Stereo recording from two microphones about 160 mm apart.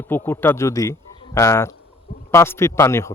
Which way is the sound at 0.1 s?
10° left (ahead or behind).